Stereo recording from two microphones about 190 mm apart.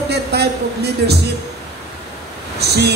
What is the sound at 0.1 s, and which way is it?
Speech, 60° right (ahead or behind).